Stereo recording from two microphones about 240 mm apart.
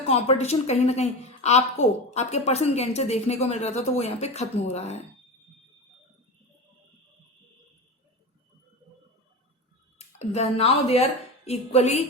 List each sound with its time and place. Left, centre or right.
0.1 s a woman's voice: left
10.0 s a woman's voice: left